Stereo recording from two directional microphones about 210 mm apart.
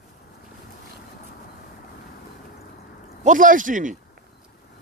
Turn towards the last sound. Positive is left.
turn(degrees=-40)  # may be behind; listen again after turning